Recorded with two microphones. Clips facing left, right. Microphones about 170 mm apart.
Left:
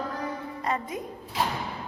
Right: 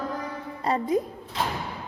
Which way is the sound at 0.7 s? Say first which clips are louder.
Right 7 dB; 35° right (ahead or behind).